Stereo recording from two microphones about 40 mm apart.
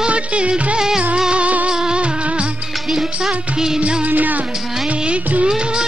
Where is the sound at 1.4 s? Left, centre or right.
Right.